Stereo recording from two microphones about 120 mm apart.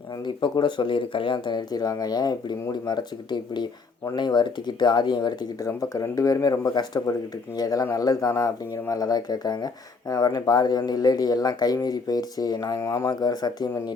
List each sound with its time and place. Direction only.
0.3 s speech: 40° left (ahead or behind)